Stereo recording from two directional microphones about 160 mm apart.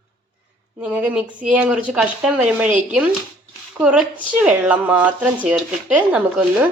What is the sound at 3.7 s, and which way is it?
A woman's voice, 5° right (ahead or behind).